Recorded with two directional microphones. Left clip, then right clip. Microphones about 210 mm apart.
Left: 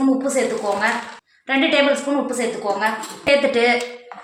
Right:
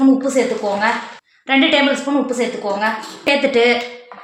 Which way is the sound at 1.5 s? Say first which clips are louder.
Right 3 dB; 45° right (ahead or behind).